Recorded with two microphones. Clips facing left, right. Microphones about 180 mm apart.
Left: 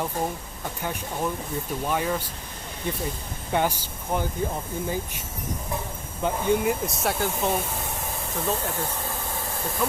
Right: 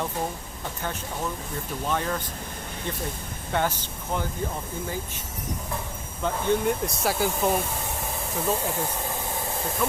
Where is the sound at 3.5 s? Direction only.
15° left (ahead or behind).